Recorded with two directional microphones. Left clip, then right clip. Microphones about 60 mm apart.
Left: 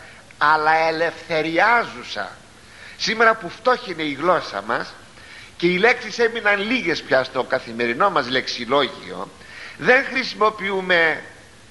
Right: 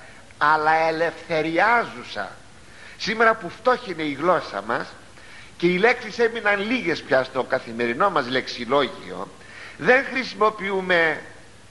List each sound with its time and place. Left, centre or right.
0.4 s a man's voice: right